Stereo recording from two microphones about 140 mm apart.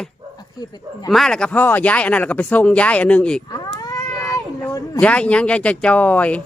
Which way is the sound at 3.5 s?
25° left (ahead or behind).